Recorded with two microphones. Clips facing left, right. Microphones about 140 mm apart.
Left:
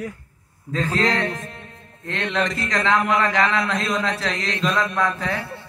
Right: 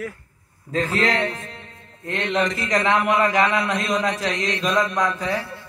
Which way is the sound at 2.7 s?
20° right (ahead or behind).